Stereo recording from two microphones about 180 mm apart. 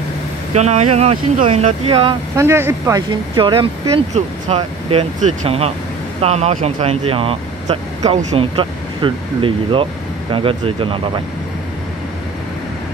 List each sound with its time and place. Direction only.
0.6 s speech: 40° right (ahead or behind)
2.3 s speech: 15° right (ahead or behind)
3.1 s speech: 25° right (ahead or behind)